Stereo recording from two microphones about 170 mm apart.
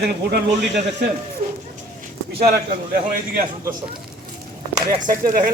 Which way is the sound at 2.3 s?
60° right (ahead or behind).